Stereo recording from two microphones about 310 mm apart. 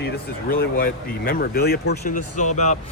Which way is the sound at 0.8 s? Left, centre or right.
Left.